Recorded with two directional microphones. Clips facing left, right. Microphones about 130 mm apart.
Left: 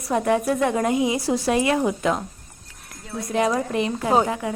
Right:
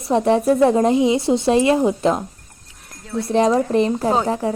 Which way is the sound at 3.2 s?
30° right (ahead or behind).